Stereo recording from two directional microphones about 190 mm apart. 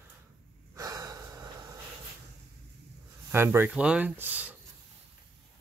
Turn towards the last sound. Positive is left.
turn(degrees=-10)  # may be behind; listen again after turning